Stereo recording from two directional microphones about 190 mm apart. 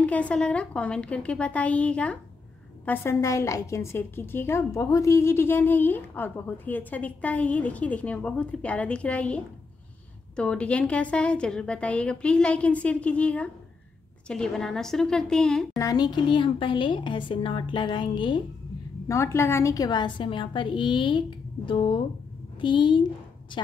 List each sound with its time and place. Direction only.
0.0 s a woman's voice: 5° left (ahead or behind)
15.8 s a woman's voice: 20° left (ahead or behind)